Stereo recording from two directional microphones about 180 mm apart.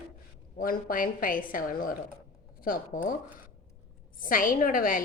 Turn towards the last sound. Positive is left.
turn(degrees=50)  # may be behind; listen again after turning